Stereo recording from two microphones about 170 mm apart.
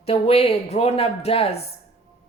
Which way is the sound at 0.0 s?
35° left (ahead or behind).